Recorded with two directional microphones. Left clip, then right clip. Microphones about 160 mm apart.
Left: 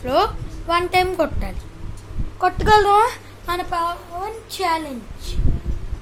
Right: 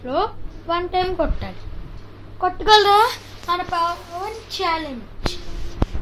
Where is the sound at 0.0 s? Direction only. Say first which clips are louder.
Left 4 dB; 25° left (ahead or behind).